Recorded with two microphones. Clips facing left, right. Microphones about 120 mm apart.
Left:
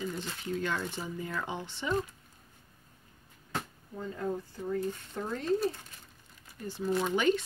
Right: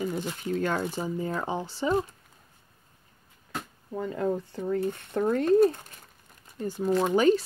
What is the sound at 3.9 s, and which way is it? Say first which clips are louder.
Speech: right 6 dB; 75° right (ahead or behind).